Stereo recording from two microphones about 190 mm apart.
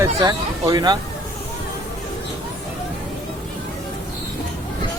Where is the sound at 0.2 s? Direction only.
20° right (ahead or behind).